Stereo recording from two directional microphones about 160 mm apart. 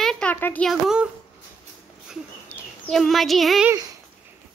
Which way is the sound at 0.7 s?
5° right (ahead or behind).